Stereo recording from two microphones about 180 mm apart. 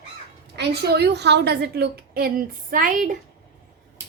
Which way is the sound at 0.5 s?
65° right (ahead or behind).